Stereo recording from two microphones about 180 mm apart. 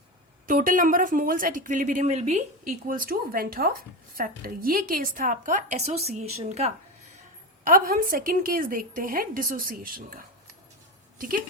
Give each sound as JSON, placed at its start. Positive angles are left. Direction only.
{"t": 0.4, "sound": "speech", "side_deg": -50}
{"t": 7.6, "sound": "speech", "side_deg": -50}